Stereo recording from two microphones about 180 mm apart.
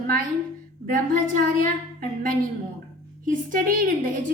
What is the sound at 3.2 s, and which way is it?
A woman's voice, 50° right (ahead or behind).